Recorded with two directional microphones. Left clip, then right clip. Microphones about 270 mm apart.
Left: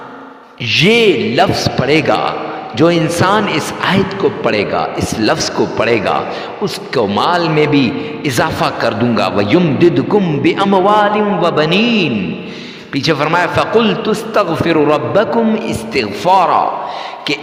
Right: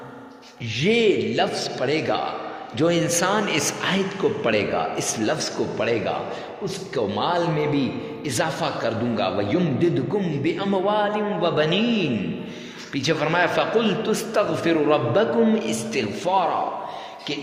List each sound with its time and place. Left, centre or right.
0.7 s a man's voice: left